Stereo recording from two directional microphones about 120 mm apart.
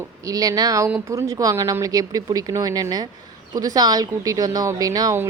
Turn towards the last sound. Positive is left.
turn(degrees=-30)  # may be behind; listen again after turning